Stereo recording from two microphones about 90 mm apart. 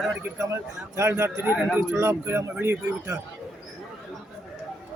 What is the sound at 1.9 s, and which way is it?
Speech, 30° right (ahead or behind).